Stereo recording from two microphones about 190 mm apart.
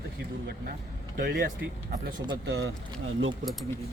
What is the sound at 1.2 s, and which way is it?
Speech, 50° right (ahead or behind).